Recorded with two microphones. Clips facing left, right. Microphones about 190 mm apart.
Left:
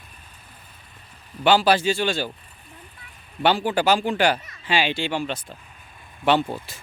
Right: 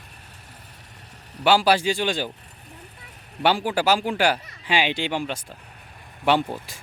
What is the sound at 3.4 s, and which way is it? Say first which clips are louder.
Speech: left 1 dB; 10° right (ahead or behind).